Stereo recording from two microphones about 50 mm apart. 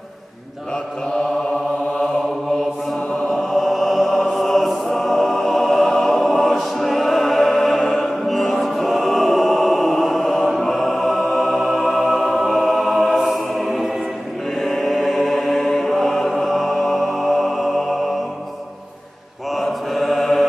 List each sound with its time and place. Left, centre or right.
3.3 s music: centre
14.6 s chant: centre
19.5 s mantra: centre